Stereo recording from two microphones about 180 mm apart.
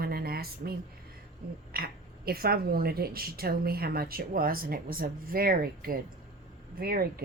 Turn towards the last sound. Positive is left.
turn(degrees=-55)  # may be behind; listen again after turning